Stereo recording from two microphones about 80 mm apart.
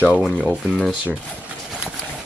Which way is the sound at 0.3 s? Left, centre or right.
Centre.